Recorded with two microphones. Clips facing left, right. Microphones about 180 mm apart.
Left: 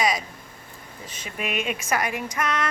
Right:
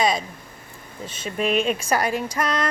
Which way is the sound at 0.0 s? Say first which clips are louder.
Right 3 dB; 25° right (ahead or behind).